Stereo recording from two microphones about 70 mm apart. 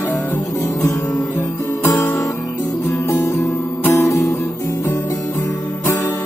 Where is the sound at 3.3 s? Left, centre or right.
Left.